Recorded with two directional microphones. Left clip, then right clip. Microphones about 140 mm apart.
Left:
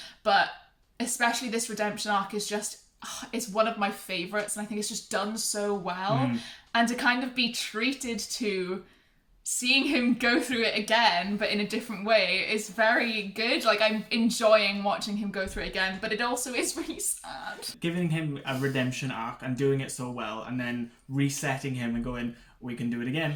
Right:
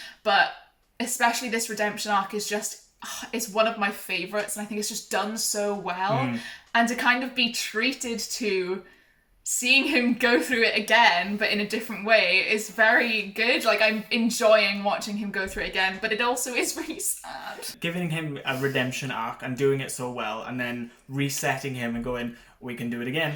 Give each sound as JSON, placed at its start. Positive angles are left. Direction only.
{"t": 0.9, "sound": "speech", "side_deg": 25}
{"t": 17.8, "sound": "speech", "side_deg": -10}